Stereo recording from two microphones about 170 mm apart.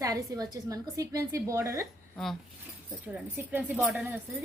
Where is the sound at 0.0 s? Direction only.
20° right (ahead or behind).